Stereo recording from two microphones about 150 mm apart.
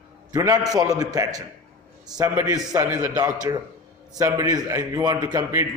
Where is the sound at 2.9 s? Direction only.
15° right (ahead or behind).